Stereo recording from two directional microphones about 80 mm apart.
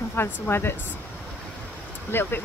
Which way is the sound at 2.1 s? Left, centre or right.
Left.